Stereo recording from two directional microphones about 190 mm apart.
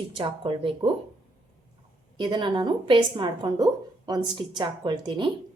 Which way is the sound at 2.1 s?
25° right (ahead or behind).